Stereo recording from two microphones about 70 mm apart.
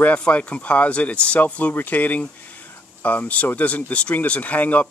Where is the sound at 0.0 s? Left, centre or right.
Centre.